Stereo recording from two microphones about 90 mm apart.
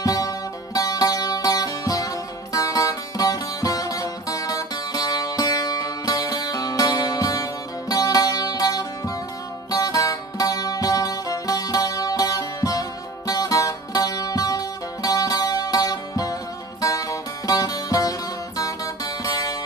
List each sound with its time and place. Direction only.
0.0 s music: 40° left (ahead or behind)